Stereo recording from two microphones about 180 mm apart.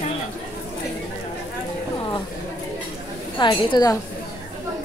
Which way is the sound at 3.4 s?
25° left (ahead or behind).